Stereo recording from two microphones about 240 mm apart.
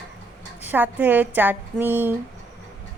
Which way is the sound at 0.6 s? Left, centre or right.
Centre.